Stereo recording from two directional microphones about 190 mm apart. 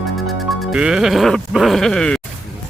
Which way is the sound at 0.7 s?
5° right (ahead or behind).